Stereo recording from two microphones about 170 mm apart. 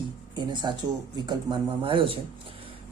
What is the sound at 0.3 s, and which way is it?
A man's voice, 25° right (ahead or behind).